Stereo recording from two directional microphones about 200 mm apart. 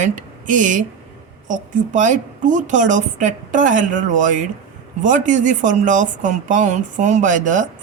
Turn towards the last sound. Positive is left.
turn(degrees=-40)  # may be behind; listen again after turning